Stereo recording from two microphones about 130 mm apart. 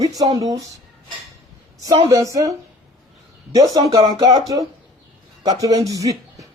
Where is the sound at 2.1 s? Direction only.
25° right (ahead or behind).